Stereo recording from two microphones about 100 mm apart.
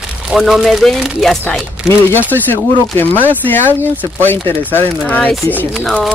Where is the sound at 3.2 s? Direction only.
20° left (ahead or behind).